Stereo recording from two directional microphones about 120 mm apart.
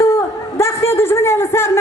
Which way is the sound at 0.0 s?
20° left (ahead or behind).